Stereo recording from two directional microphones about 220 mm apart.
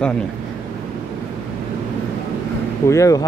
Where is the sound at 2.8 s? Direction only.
15° left (ahead or behind).